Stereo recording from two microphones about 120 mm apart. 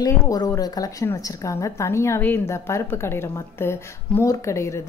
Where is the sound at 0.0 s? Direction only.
35° left (ahead or behind).